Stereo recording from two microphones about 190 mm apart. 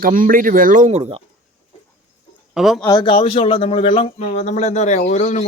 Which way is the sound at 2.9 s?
25° left (ahead or behind).